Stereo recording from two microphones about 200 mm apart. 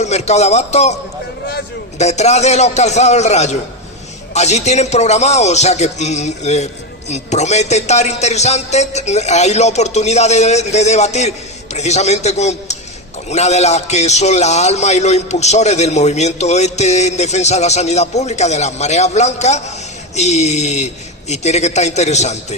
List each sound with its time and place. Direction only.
0.0 s a man's voice: 35° left (ahead or behind)
2.0 s a man's voice: 35° left (ahead or behind)